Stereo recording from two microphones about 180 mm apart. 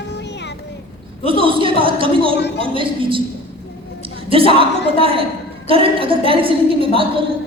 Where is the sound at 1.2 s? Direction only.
30° right (ahead or behind).